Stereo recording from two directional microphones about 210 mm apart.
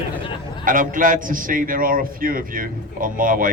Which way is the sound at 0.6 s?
40° right (ahead or behind).